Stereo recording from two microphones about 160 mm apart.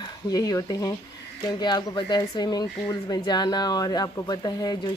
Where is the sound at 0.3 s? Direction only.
20° left (ahead or behind).